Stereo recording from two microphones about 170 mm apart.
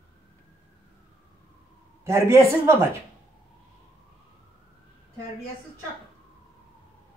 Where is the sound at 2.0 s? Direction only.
15° right (ahead or behind).